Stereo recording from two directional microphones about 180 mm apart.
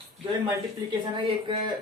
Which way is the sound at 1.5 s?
25° right (ahead or behind).